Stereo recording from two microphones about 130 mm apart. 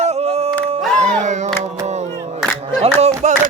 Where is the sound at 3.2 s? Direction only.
65° right (ahead or behind).